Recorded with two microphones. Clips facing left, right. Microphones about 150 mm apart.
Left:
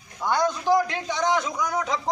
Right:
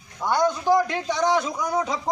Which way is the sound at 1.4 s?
30° right (ahead or behind).